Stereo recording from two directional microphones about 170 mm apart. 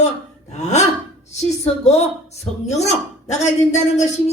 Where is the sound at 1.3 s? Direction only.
40° left (ahead or behind).